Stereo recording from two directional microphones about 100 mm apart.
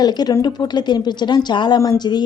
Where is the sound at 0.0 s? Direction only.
45° left (ahead or behind).